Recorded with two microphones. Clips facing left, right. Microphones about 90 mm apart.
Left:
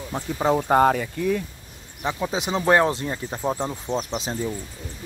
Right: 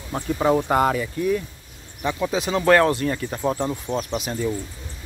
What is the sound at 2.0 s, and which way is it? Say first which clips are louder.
Speech: right 2 dB; 20° left (ahead or behind).